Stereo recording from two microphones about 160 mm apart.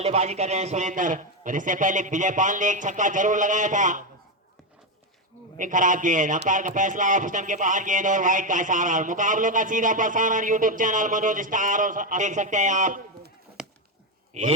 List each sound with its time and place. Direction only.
0.0 s speech: 40° right (ahead or behind)
5.5 s speech: 55° right (ahead or behind)
13.6 s chop: 5° right (ahead or behind)
14.3 s speech: 45° right (ahead or behind)